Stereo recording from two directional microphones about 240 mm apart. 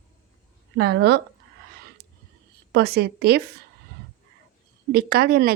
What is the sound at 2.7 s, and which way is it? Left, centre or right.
Speech, right.